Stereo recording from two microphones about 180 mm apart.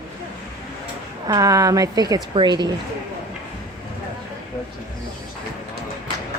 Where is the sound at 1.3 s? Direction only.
20° right (ahead or behind).